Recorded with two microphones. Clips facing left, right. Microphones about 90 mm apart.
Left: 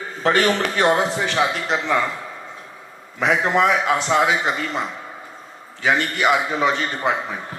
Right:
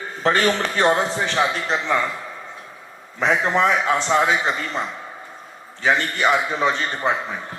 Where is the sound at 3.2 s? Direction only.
35° right (ahead or behind).